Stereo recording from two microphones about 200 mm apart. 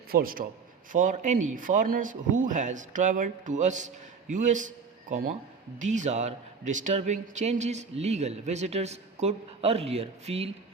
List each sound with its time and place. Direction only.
0.1 s a man's voice: 45° right (ahead or behind); by 10.5 s 30° right (ahead or behind)